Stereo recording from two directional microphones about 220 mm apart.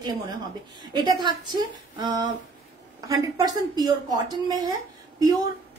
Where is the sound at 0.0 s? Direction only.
20° right (ahead or behind).